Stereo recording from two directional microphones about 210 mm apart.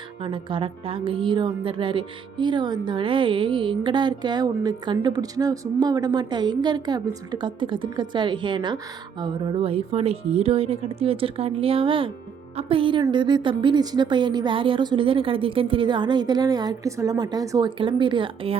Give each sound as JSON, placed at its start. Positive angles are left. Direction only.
{"t": 0.2, "sound": "speech", "side_deg": -25}